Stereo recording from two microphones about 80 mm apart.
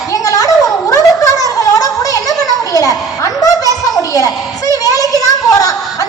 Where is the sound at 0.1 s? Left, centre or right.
Left.